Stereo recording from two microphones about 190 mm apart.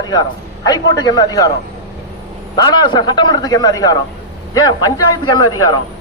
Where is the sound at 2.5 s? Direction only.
20° left (ahead or behind).